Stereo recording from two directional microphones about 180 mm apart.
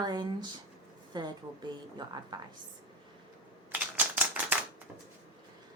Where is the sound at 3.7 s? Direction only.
10° right (ahead or behind).